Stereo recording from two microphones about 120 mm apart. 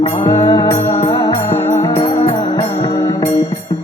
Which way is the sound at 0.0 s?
40° left (ahead or behind).